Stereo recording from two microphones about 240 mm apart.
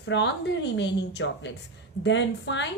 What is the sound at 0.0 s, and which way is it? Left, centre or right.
A woman's voice, left.